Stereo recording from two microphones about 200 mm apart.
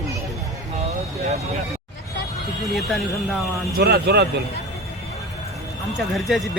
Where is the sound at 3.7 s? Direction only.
55° right (ahead or behind).